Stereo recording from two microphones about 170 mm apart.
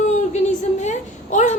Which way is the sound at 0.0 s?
45° left (ahead or behind).